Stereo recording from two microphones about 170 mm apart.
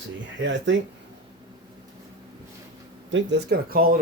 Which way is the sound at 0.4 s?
90° right.